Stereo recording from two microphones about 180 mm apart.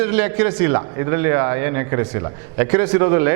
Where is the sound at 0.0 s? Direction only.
10° right (ahead or behind).